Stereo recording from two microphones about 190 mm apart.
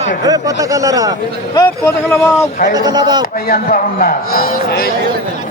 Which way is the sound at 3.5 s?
50° left (ahead or behind).